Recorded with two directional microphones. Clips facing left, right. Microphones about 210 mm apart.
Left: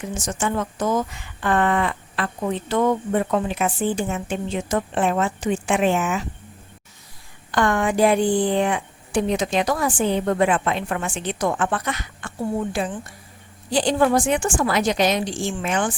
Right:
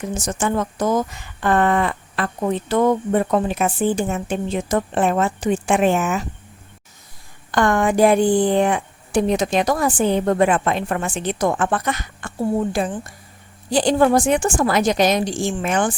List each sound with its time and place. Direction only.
0.0 s a woman's voice: 40° right (ahead or behind)
7.5 s a woman's voice: 45° right (ahead or behind)